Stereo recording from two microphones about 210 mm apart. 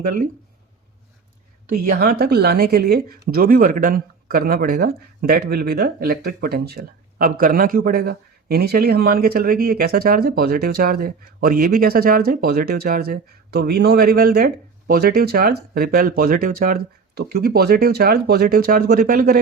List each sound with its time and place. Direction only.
1.7 s a woman's voice: 45° right (ahead or behind)